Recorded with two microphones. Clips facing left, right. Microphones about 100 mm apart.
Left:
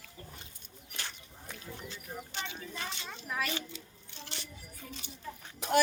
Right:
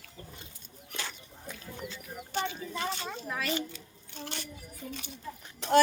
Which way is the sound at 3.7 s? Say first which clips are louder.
Even; 50° right (ahead or behind).